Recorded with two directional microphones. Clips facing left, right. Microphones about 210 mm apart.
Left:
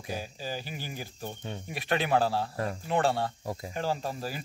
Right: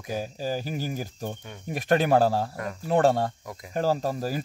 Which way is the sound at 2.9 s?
45° right (ahead or behind).